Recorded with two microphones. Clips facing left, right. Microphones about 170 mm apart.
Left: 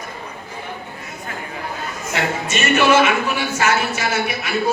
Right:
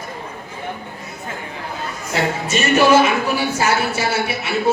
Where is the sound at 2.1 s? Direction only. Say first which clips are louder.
Right 2 dB; 35° right (ahead or behind).